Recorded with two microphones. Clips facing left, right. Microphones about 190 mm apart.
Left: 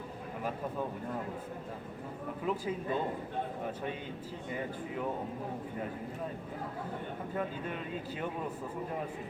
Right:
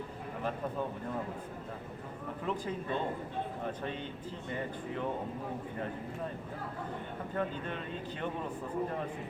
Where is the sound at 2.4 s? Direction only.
5° left (ahead or behind).